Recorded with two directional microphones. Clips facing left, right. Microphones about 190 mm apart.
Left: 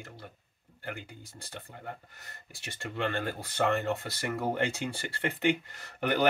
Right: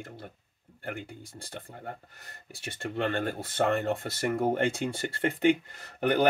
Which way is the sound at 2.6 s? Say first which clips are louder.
Right 3 dB; 55° right (ahead or behind).